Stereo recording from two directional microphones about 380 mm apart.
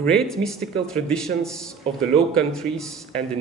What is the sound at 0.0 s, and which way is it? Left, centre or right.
Speech, centre.